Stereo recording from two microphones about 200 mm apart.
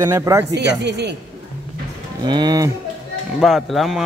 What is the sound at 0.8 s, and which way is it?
Speech, 60° right (ahead or behind).